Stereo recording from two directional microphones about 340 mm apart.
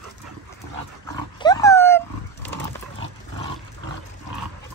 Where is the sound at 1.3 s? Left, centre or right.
Centre.